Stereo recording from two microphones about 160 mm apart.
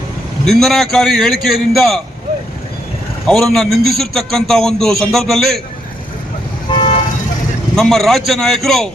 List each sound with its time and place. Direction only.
0.4 s a man's voice: centre (ahead or behind)
3.2 s a man's voice: centre (ahead or behind)
6.7 s vehicle: 40° left (ahead or behind)
7.8 s a man's voice: centre (ahead or behind)